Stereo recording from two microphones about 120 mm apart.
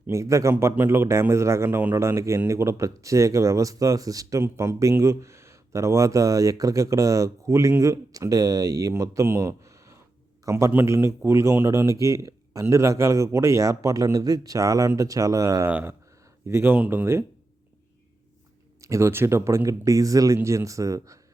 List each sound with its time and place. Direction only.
0.1 s a man's voice: 25° right (ahead or behind)
18.8 s speech: 25° right (ahead or behind)